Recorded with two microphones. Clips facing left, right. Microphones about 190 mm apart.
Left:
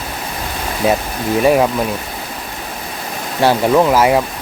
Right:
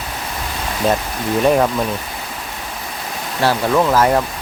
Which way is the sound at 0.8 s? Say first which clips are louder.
Left 2 dB; 10° left (ahead or behind).